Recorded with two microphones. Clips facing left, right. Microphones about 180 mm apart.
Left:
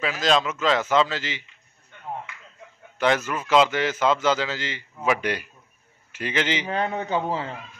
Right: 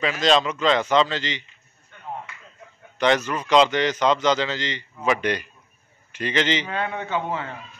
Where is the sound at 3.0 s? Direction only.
5° left (ahead or behind).